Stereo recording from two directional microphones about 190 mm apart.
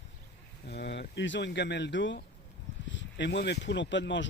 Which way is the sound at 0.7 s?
65° left (ahead or behind).